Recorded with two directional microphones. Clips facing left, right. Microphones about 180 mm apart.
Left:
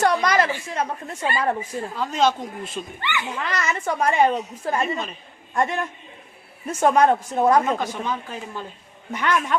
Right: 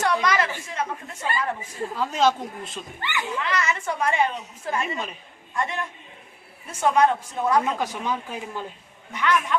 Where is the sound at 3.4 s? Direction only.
40° left (ahead or behind).